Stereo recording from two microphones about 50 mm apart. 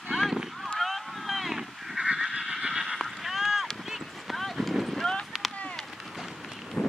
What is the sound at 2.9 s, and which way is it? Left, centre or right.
Horse, centre.